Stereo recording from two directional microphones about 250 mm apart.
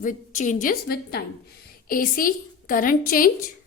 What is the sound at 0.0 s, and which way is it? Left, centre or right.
Speech, left.